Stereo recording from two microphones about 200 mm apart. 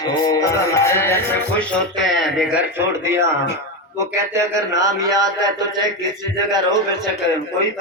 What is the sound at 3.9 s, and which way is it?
A man's voice, 15° right (ahead or behind).